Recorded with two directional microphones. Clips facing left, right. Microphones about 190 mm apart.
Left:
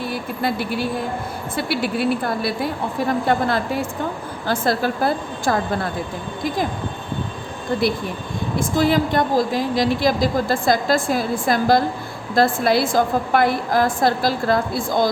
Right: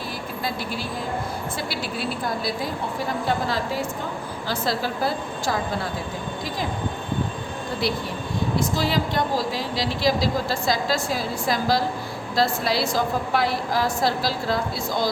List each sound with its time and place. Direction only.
0.1 s vehicle: 60° left (ahead or behind)
1.5 s a woman's voice: 60° left (ahead or behind)
8.5 s a woman's voice: 50° left (ahead or behind)